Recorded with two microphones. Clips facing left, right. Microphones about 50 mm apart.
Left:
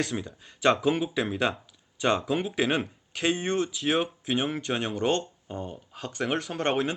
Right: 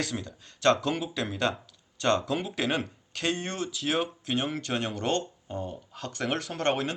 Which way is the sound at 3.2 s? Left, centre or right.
Centre.